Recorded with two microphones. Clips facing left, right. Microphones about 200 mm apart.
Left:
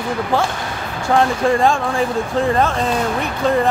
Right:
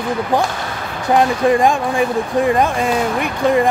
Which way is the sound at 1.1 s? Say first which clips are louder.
Right 2 dB; 15° right (ahead or behind).